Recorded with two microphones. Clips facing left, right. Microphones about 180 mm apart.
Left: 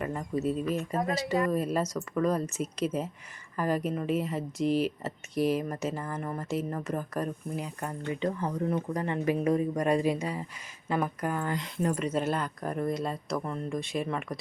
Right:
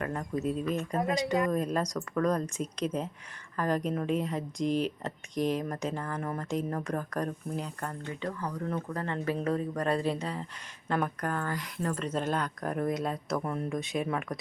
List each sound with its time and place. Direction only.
0.0 s speech: centre (ahead or behind)